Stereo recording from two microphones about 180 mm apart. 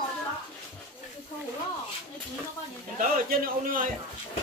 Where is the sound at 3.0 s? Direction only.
50° right (ahead or behind).